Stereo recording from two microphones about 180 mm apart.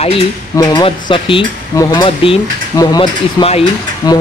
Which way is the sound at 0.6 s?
25° left (ahead or behind).